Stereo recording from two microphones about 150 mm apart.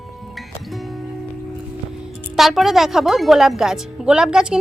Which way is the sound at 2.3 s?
Centre (ahead or behind).